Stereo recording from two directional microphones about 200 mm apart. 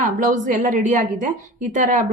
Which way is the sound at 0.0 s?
40° right (ahead or behind).